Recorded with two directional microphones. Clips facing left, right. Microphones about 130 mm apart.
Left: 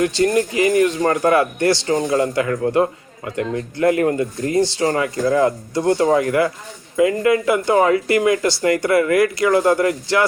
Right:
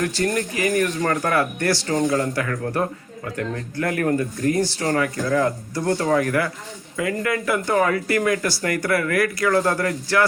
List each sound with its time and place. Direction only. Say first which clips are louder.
0.0 s speech: left 6 dB; 20° left (ahead or behind)